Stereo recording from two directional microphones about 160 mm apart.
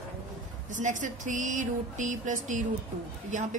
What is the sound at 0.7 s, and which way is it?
A woman's voice, 50° right (ahead or behind).